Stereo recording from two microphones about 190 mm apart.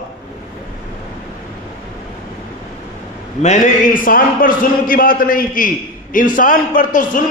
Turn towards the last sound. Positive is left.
turn(degrees=45)  # may be behind; listen again after turning